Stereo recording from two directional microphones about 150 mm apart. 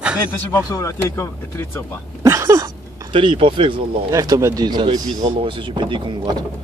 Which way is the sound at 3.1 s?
35° right (ahead or behind).